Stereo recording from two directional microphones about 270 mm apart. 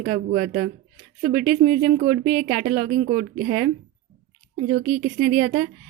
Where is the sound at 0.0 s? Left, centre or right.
Right.